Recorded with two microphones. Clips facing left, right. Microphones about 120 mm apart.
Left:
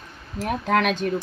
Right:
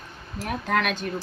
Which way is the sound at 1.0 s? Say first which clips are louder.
Left 6 dB; centre (ahead or behind).